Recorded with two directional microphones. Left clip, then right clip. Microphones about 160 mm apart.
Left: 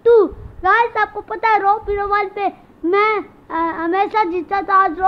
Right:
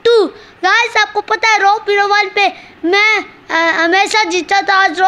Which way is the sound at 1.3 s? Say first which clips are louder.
Right 4 dB; 25° right (ahead or behind).